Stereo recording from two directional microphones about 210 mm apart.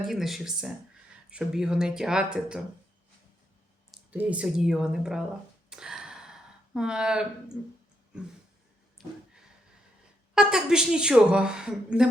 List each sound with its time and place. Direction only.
0.0 s a woman's voice: centre (ahead or behind)
3.9 s a woman's voice: 5° right (ahead or behind)
5.7 s a sound: 5° right (ahead or behind)
6.7 s a woman's voice: 5° right (ahead or behind)
9.0 s a sound: centre (ahead or behind)
10.3 s a woman's voice: 5° right (ahead or behind)